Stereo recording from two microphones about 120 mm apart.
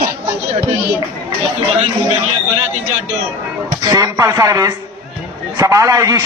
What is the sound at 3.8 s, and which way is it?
A man's voice, 30° right (ahead or behind).